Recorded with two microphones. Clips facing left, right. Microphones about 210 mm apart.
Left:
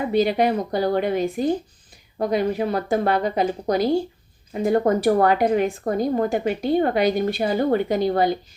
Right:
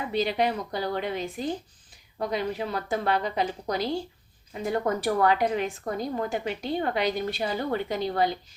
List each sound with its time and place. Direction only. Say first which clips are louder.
0.3 s a woman's voice: left 6 dB; 50° left (ahead or behind)